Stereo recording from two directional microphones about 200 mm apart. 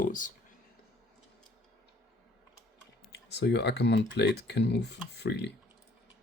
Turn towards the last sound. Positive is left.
turn(degrees=55)  # may be behind; listen again after turning